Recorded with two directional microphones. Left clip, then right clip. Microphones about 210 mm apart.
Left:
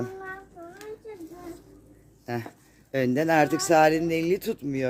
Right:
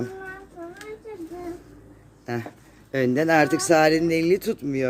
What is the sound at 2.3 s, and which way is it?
Speech, 20° left (ahead or behind).